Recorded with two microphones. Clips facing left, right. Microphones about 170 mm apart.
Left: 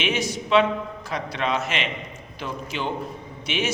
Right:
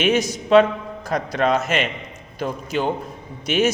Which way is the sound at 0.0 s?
45° right (ahead or behind).